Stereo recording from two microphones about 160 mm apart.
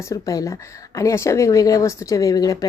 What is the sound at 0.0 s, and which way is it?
Speech, 20° left (ahead or behind).